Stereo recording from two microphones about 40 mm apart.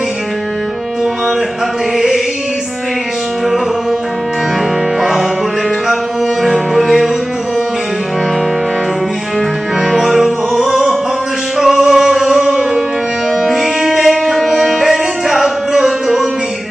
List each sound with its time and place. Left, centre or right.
2.0 s music: centre
4.9 s music: centre
6.4 s music: centre
9.8 s music: centre
13.4 s music: centre